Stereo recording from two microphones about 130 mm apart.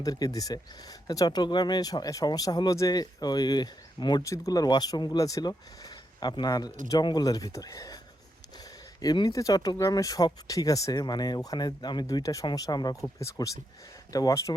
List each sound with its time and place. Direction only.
0.0 s speech: 30° left (ahead or behind)
9.0 s speech: 30° left (ahead or behind)